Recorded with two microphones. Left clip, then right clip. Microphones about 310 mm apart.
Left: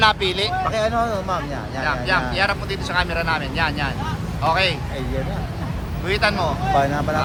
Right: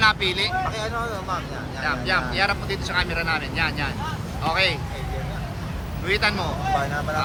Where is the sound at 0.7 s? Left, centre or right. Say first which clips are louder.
Left 7 dB; left.